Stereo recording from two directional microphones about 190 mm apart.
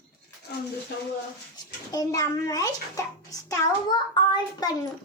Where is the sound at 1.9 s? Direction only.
20° left (ahead or behind).